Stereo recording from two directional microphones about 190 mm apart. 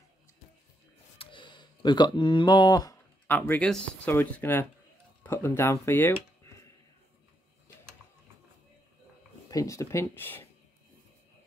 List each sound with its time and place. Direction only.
1.1 s a sound: 25° left (ahead or behind)
3.3 s speech: 10° left (ahead or behind)
9.5 s speech: 15° left (ahead or behind)